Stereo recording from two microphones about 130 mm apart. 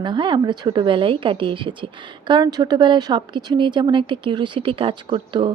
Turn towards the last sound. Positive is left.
turn(degrees=-40)  # may be behind; listen again after turning